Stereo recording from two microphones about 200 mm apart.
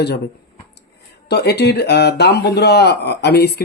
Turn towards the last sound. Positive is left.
turn(degrees=55)  # may be behind; listen again after turning